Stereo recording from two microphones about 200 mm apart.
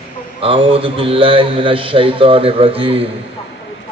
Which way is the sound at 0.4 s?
30° right (ahead or behind).